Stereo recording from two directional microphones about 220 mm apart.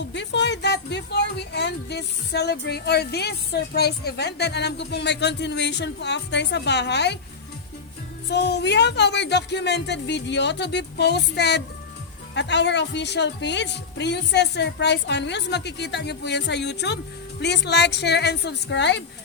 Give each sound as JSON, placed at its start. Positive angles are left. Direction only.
{"t": 0.0, "sound": "speech", "side_deg": 55}
{"t": 8.3, "sound": "speech", "side_deg": 50}